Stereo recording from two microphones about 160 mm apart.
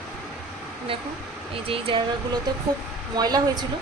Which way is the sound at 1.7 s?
35° right (ahead or behind).